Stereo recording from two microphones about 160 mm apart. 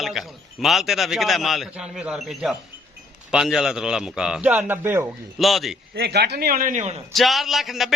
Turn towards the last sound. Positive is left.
turn(degrees=0)  # may be behind; listen again after turning